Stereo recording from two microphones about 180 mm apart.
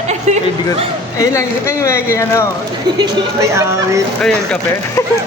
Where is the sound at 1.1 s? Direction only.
15° left (ahead or behind).